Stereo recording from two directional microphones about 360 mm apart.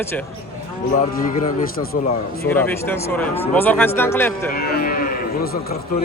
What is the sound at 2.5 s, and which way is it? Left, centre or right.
Speech, centre.